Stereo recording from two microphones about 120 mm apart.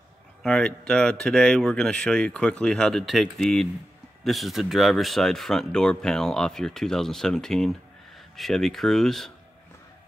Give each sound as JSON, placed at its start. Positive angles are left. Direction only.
{"t": 0.4, "sound": "speech", "side_deg": 5}